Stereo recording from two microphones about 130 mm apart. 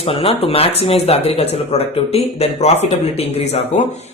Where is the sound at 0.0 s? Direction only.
45° left (ahead or behind).